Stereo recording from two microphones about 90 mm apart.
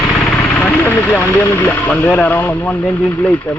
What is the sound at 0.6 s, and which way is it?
Speech, 20° left (ahead or behind).